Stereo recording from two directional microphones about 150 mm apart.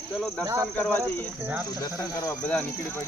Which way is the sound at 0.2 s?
5° left (ahead or behind).